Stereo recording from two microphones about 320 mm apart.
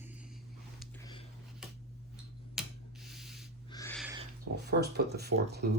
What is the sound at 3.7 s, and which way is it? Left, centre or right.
Owl, centre.